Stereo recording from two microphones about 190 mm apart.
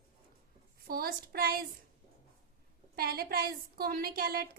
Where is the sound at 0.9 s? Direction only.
50° right (ahead or behind).